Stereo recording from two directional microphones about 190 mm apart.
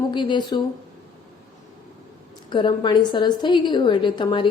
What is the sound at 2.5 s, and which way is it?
A woman's voice, 25° left (ahead or behind).